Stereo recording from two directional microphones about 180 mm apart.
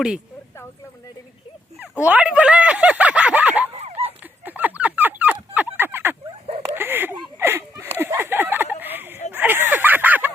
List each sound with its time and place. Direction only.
1.8 s speech: 10° right (ahead or behind)
3.7 s dog: 35° right (ahead or behind)
4.2 s a sound: 10° right (ahead or behind)